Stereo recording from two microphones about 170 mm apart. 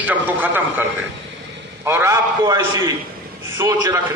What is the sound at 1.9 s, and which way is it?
A man's voice, 15° right (ahead or behind).